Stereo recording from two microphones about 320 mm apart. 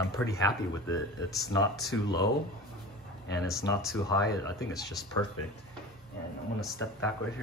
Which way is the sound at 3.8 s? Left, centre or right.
Centre.